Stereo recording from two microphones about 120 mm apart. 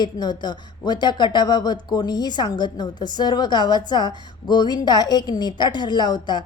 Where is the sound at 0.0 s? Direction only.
35° left (ahead or behind).